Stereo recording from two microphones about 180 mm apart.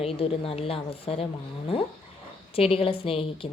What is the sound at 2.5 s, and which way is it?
Speech, 30° left (ahead or behind).